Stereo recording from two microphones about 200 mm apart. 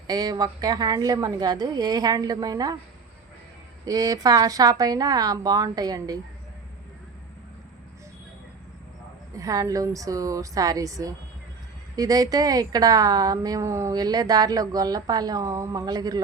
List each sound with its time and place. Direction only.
0.1 s a woman's voice: 20° right (ahead or behind)
3.8 s a woman's voice: 20° right (ahead or behind)
9.3 s a woman's voice: 15° right (ahead or behind)